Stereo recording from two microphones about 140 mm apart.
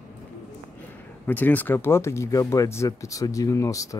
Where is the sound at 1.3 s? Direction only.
10° left (ahead or behind).